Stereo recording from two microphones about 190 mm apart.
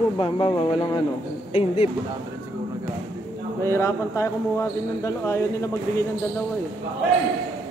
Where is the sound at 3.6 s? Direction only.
15° left (ahead or behind).